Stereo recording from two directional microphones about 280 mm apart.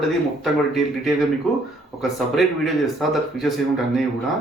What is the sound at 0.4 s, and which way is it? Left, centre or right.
Speech, centre.